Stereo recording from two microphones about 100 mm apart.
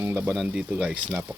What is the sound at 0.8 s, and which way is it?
Speech, 10° right (ahead or behind).